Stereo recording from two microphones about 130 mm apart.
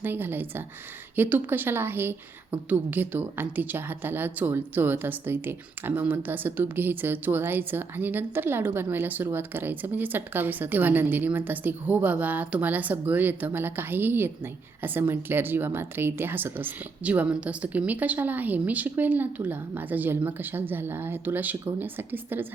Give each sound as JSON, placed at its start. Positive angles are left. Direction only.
{"t": 0.0, "sound": "a woman's voice", "side_deg": -15}